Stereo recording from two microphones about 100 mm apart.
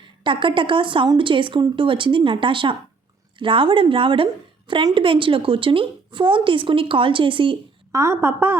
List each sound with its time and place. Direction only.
0.3 s a woman's voice: 55° right (ahead or behind)
7.9 s a woman's voice: 25° right (ahead or behind)